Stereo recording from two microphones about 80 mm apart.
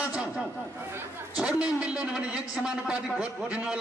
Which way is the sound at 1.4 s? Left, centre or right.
Centre.